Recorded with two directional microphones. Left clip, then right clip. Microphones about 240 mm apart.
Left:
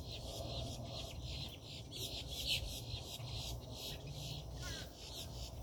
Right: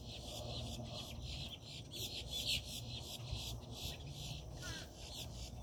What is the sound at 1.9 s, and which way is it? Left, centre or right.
Chicken, right.